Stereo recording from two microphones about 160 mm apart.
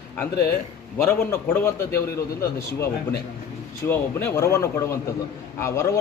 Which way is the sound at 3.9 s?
15° left (ahead or behind).